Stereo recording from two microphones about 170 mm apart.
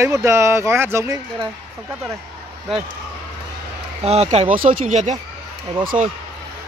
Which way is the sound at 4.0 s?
40° right (ahead or behind).